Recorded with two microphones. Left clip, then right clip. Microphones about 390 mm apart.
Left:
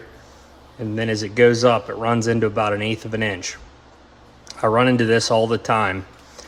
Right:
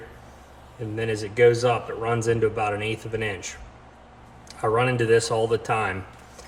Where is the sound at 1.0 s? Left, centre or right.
Left.